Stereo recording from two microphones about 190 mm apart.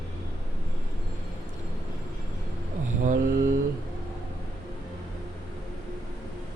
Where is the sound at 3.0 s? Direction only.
45° right (ahead or behind).